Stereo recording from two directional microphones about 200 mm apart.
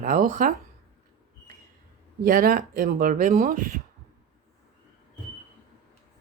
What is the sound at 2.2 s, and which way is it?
Speech, 45° right (ahead or behind).